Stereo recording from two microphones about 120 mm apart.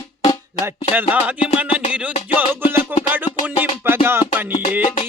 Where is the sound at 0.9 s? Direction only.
15° right (ahead or behind).